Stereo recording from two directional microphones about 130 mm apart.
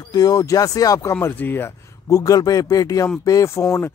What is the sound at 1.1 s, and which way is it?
Speech, 15° left (ahead or behind).